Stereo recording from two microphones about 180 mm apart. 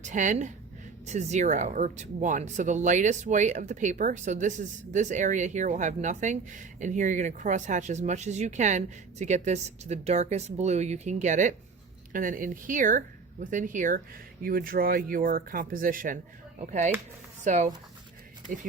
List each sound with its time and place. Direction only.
0.0 s speech: 45° right (ahead or behind)